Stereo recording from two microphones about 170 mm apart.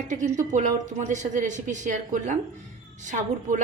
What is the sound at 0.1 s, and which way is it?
A woman's voice, 45° right (ahead or behind).